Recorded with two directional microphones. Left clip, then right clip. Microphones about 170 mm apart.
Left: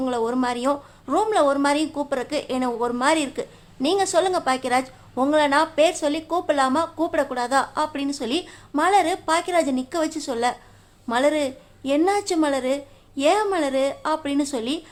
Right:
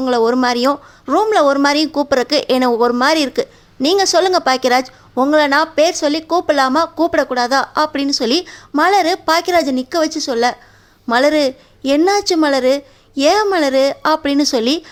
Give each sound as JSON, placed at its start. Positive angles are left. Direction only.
{"t": 0.0, "sound": "a woman's voice", "side_deg": -30}